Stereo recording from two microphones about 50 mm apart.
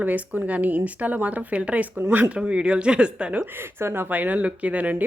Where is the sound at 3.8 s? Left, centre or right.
Right.